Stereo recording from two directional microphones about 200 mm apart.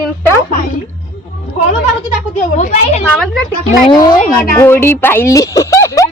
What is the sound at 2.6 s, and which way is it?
Speech, 35° left (ahead or behind).